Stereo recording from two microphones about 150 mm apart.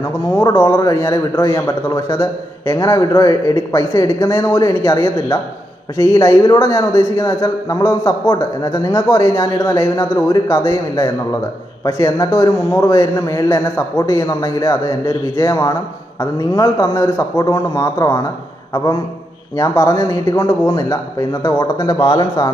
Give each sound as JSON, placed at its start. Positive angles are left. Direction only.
{"t": 0.0, "sound": "a man's voice", "side_deg": 20}
{"t": 19.5, "sound": "a man's voice", "side_deg": 20}